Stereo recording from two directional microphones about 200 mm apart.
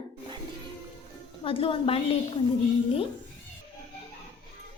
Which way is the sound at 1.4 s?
25° left (ahead or behind).